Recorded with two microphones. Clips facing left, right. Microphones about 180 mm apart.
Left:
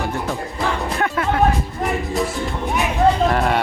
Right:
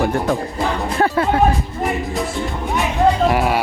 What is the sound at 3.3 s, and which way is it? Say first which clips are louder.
Speech: right 1 dB; 5° right (ahead or behind).